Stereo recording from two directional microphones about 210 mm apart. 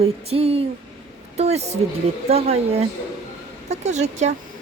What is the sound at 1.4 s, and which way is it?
Speech, 30° right (ahead or behind).